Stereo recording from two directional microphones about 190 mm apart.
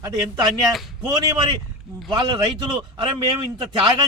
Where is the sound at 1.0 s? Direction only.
20° right (ahead or behind).